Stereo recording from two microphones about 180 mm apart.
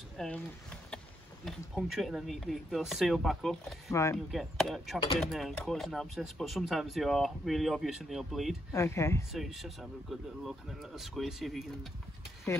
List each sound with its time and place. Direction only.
0.2 s speech: centre (ahead or behind)
3.9 s speech: 15° left (ahead or behind)
4.3 s speech: centre (ahead or behind)
8.7 s speech: 15° left (ahead or behind)
9.3 s speech: centre (ahead or behind)